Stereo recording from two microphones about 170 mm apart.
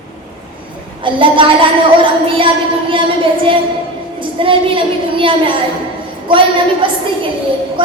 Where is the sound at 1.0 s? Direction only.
30° right (ahead or behind).